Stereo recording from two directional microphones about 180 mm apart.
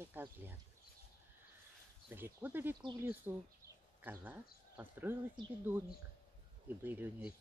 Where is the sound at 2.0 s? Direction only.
10° right (ahead or behind).